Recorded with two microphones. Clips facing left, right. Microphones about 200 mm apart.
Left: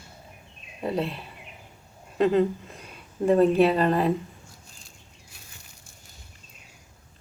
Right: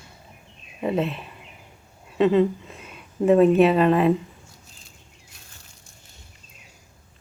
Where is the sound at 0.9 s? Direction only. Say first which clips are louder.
Right 3 dB; 35° left (ahead or behind).